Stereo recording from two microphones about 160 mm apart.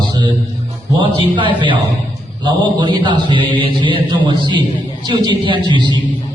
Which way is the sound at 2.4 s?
30° right (ahead or behind).